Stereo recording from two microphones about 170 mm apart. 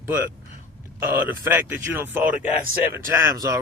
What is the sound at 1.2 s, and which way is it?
Speech, 15° right (ahead or behind).